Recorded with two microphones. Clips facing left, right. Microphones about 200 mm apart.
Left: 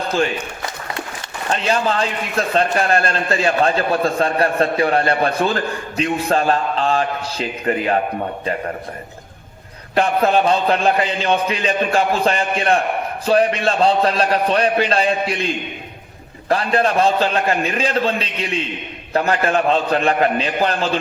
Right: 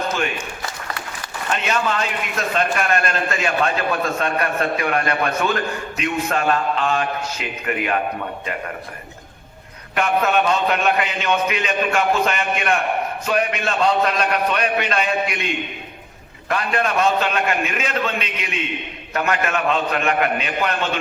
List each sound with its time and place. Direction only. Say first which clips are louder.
1.5 s a man's voice: left 3 dB; 30° left (ahead or behind)
9.9 s a man's voice: left 3 dB; 30° left (ahead or behind)